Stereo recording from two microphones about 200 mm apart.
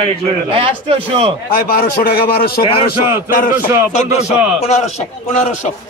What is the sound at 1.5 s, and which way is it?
A man's voice, 45° left (ahead or behind).